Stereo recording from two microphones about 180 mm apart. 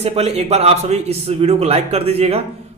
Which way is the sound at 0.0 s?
35° right (ahead or behind).